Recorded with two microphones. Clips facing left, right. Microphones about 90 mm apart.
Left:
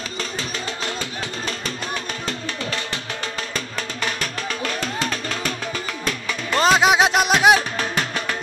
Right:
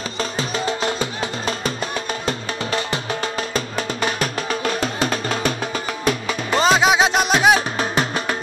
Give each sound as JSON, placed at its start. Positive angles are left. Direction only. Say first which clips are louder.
{"t": 0.2, "sound": "music", "louder": "right 7 dB", "side_deg": -20}
{"t": 6.0, "sound": "music", "louder": "right 6 dB", "side_deg": -15}
{"t": 6.7, "sound": "music", "louder": "left 1 dB", "side_deg": 5}
{"t": 7.7, "sound": "music", "louder": "right 3 dB", "side_deg": -30}